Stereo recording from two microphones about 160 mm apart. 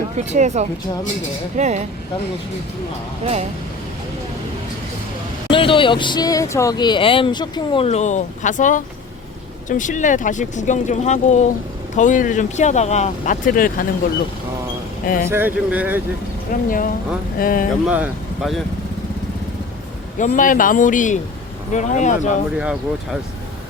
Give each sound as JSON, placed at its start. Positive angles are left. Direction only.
{"t": 0.2, "sound": "speech", "side_deg": -45}
{"t": 5.5, "sound": "speech", "side_deg": 30}
{"t": 7.9, "sound": "speech", "side_deg": 45}
{"t": 15.0, "sound": "speech", "side_deg": 60}
{"t": 15.3, "sound": "speech", "side_deg": -10}
{"t": 16.5, "sound": "speech", "side_deg": 60}
{"t": 17.8, "sound": "speech", "side_deg": -5}
{"t": 20.1, "sound": "speech", "side_deg": 55}